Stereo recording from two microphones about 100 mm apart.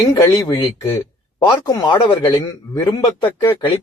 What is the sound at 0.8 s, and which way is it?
Speech, 25° left (ahead or behind).